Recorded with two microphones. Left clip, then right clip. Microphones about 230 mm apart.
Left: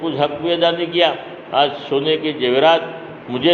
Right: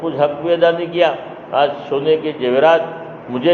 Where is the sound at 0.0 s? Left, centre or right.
Left.